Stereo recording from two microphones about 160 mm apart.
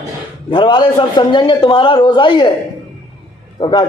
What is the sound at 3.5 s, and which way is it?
Speech, 30° left (ahead or behind).